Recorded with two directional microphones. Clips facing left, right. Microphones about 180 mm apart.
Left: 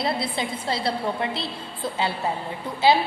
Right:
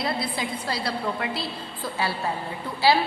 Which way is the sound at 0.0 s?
25° left (ahead or behind).